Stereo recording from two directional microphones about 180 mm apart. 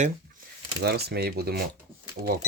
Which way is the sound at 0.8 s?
65° right (ahead or behind).